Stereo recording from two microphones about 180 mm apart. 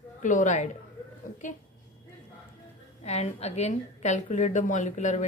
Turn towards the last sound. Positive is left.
turn(degrees=40)  # may be behind; listen again after turning